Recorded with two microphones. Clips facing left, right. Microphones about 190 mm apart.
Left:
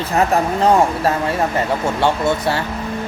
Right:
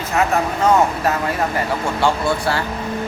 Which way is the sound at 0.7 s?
30° left (ahead or behind).